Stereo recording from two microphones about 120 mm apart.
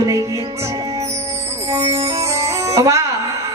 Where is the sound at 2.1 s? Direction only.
25° right (ahead or behind).